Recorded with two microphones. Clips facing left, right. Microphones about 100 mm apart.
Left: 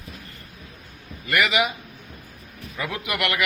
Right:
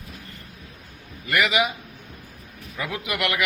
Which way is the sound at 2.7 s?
15° right (ahead or behind).